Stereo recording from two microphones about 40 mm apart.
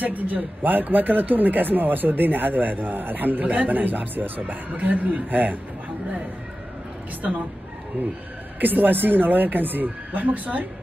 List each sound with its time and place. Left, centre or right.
0.0 s speech: right
8.5 s speech: right